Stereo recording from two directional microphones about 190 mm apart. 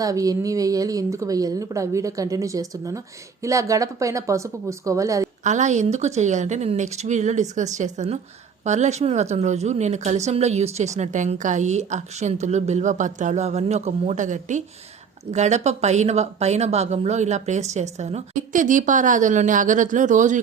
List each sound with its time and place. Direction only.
0.0 s a woman's voice: 20° right (ahead or behind)
5.4 s a woman's voice: 40° right (ahead or behind)